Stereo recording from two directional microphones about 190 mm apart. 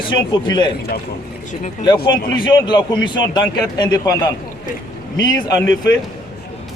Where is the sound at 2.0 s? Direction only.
25° left (ahead or behind).